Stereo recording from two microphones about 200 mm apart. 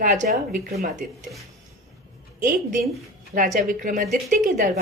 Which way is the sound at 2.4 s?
40° right (ahead or behind).